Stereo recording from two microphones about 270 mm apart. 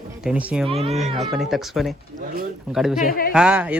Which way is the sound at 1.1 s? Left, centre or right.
Centre.